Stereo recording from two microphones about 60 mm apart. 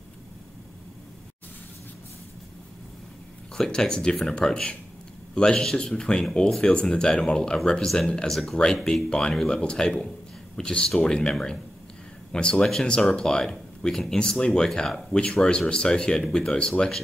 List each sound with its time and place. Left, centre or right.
3.5 s speech: centre